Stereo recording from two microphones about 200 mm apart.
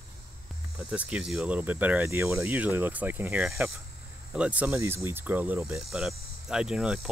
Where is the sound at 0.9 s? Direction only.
5° right (ahead or behind).